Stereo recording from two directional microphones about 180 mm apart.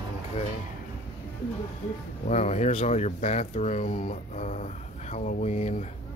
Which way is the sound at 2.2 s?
40° left (ahead or behind).